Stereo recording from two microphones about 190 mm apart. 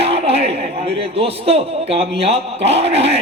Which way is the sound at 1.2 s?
30° right (ahead or behind).